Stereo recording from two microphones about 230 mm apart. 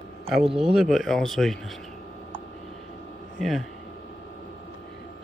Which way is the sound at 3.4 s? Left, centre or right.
Centre.